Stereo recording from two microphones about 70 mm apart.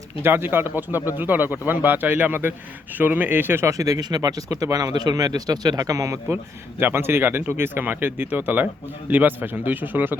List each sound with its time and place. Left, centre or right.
0.2 s speech: right
3.7 s speech: right
6.2 s speech: right